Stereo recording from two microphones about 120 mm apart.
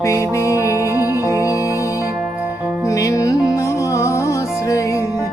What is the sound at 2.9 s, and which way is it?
Music, 25° left (ahead or behind).